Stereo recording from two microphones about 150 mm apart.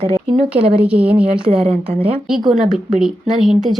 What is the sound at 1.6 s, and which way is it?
Speech, 40° right (ahead or behind).